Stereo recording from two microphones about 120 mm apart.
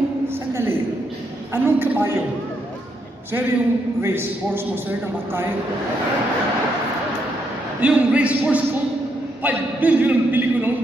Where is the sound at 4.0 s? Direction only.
20° right (ahead or behind).